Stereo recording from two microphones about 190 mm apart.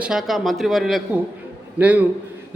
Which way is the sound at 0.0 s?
Centre (ahead or behind).